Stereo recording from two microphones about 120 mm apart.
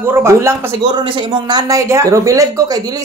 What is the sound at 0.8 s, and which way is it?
Speech, 40° right (ahead or behind).